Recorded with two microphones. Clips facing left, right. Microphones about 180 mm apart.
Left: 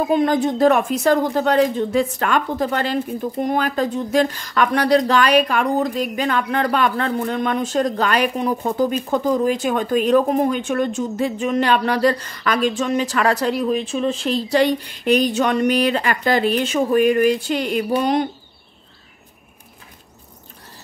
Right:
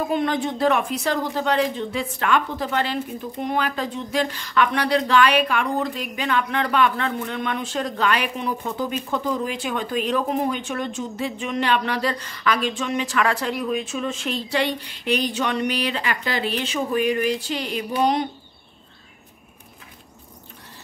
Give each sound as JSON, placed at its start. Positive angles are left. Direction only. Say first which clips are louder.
{"t": 0.1, "sound": "speech", "louder": "left 6 dB", "side_deg": 40}